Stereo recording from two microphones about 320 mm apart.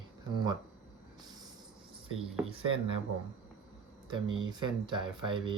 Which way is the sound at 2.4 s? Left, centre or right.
Centre.